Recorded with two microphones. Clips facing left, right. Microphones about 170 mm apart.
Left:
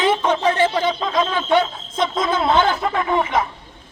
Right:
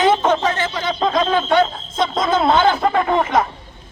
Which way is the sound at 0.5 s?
30° left (ahead or behind).